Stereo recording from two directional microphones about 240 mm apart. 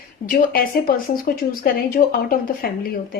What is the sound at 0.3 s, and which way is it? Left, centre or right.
A woman's voice, left.